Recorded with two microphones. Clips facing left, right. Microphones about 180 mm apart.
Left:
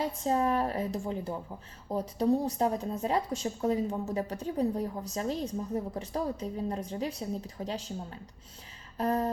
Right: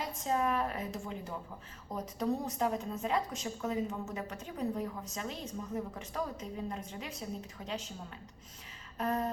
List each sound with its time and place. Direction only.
0.0 s speech: 35° left (ahead or behind)